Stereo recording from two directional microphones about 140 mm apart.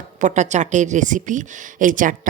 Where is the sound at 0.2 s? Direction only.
60° right (ahead or behind).